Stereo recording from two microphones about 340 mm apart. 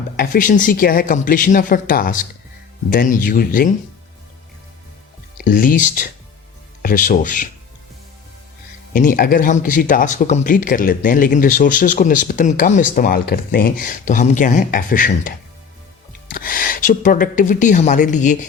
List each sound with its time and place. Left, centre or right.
0.2 s speech: left
5.4 s speech: left
8.9 s speech: left
16.3 s speech: left